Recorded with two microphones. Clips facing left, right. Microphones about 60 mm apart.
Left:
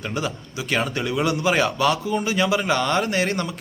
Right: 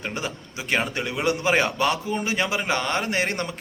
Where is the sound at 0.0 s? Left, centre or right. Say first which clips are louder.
Left 3 dB; right.